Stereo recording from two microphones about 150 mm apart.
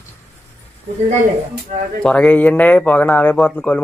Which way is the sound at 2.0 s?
10° left (ahead or behind).